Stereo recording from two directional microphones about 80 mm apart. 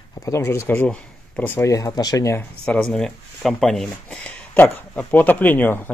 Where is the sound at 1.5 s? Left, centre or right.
Left.